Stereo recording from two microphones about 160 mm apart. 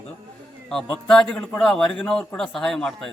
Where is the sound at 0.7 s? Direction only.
5° left (ahead or behind).